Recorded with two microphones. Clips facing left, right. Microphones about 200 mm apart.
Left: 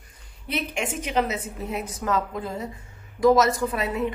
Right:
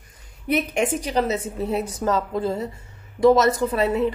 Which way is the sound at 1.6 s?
30° right (ahead or behind).